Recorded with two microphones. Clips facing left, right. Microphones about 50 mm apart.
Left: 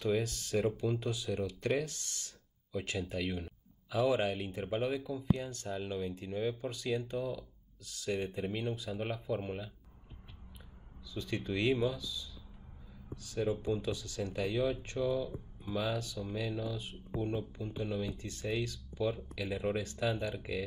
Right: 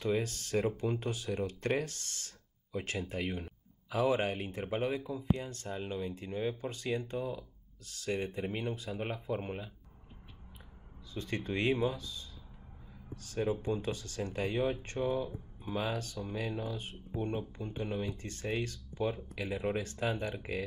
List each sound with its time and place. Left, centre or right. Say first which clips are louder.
0.0 s speech: even; right
11.1 s speech: even; right
19.1 s speech: even; right
19.7 s speech: even; right